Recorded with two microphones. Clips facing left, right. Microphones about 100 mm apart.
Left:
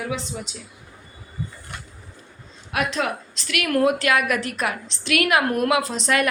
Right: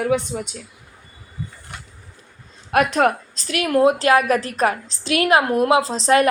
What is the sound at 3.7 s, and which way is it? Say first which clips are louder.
Speech: right 4 dB; 20° right (ahead or behind).